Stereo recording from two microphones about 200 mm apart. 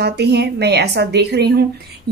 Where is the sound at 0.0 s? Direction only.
55° right (ahead or behind).